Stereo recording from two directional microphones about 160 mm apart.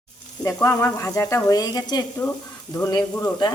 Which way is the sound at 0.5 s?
10° left (ahead or behind).